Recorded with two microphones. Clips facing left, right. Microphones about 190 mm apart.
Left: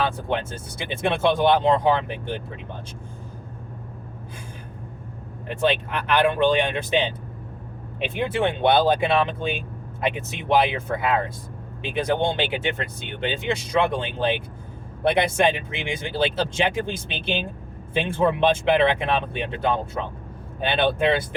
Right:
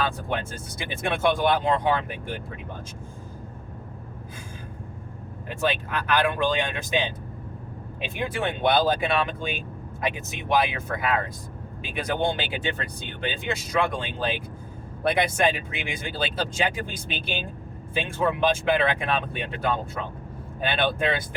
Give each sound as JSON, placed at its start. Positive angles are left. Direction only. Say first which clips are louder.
{"t": 0.0, "sound": "speech", "louder": "left 3 dB", "side_deg": 25}
{"t": 5.5, "sound": "speech", "louder": "left 4 dB", "side_deg": 25}